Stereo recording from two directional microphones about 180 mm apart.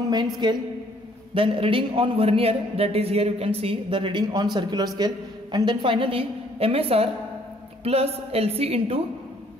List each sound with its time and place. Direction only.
0.4 s a man's voice: 25° right (ahead or behind)